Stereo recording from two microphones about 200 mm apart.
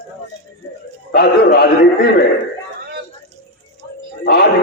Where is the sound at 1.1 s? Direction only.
55° left (ahead or behind).